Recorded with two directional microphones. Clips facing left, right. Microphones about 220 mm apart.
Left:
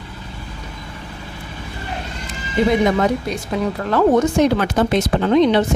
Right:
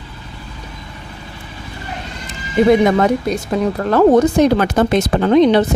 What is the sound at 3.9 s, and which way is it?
Speech, 35° right (ahead or behind).